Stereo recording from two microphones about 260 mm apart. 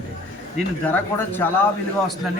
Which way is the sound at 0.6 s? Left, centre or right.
Centre.